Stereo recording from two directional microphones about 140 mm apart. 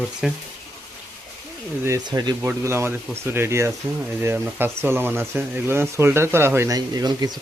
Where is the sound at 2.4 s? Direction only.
20° right (ahead or behind).